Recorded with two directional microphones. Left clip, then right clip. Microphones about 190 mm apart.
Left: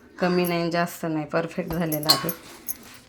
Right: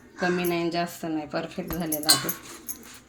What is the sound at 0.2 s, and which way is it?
Speech, 40° left (ahead or behind).